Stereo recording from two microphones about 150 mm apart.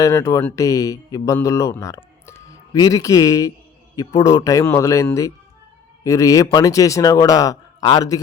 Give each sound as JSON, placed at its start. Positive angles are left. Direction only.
{"t": 0.0, "sound": "speech", "side_deg": 20}